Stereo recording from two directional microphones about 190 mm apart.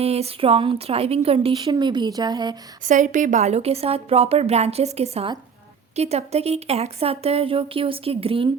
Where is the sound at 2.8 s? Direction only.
45° right (ahead or behind).